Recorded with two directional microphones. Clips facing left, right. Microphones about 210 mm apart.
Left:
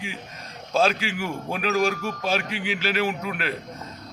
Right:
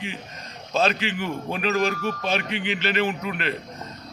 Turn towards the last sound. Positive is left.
turn(degrees=5)  # may be behind; listen again after turning